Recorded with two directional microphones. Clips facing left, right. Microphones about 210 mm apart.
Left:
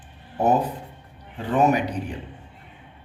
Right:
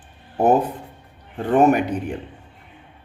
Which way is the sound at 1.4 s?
55° right (ahead or behind).